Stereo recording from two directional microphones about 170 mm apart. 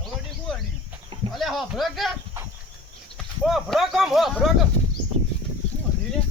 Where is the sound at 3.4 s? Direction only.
Centre (ahead or behind).